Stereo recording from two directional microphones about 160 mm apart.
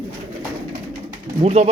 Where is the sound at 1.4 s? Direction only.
40° right (ahead or behind).